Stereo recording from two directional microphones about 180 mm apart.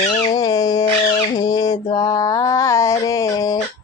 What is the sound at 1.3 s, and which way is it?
Mantra, 20° left (ahead or behind).